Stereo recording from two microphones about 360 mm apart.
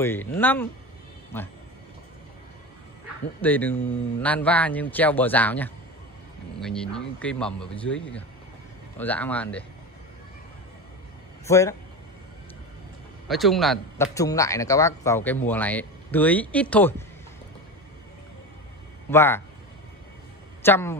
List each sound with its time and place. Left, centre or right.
0.0 s speech: centre
3.4 s speech: centre
11.4 s speech: centre
13.3 s speech: centre
19.0 s speech: centre
20.6 s speech: centre